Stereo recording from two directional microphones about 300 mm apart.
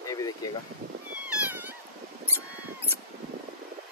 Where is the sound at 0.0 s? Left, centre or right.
Centre.